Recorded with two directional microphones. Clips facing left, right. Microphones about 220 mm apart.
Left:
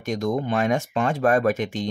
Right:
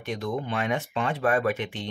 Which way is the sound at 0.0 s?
45° left (ahead or behind).